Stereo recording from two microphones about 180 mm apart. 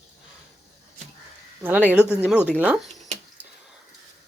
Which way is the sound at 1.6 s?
10° right (ahead or behind).